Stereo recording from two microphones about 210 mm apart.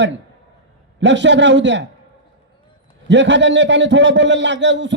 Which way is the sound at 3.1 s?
60° right (ahead or behind).